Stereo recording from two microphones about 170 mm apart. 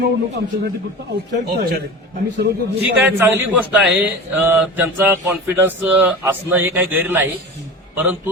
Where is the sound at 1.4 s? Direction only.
70° right (ahead or behind).